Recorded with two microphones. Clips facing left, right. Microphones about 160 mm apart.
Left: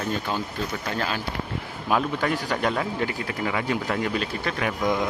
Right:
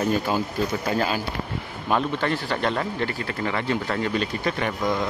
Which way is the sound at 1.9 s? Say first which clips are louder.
Even; 5° left (ahead or behind).